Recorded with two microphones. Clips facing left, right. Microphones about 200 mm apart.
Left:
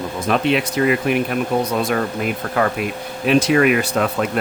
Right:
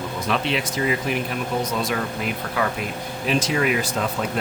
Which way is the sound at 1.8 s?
50° left (ahead or behind).